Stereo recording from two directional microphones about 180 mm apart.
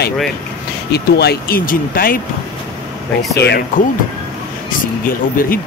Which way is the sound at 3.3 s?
65° left (ahead or behind).